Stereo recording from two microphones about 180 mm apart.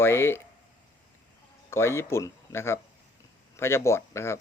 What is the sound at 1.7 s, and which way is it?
Speech, 15° left (ahead or behind).